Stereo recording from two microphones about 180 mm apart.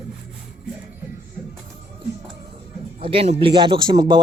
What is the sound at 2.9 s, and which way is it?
Speech, 30° right (ahead or behind).